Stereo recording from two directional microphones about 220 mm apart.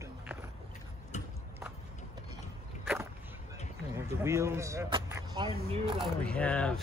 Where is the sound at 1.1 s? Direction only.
30° left (ahead or behind).